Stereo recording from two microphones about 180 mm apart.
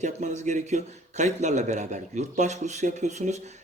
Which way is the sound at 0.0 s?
40° right (ahead or behind).